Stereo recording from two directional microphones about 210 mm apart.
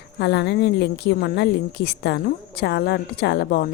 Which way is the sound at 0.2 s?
55° left (ahead or behind).